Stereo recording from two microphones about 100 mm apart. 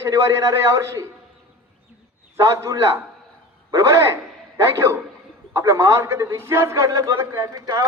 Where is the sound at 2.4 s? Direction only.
30° right (ahead or behind).